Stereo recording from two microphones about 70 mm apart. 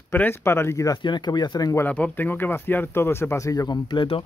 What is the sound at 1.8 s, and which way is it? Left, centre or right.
Speech, left.